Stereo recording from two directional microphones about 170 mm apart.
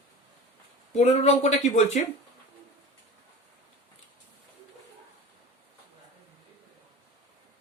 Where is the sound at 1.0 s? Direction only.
40° left (ahead or behind).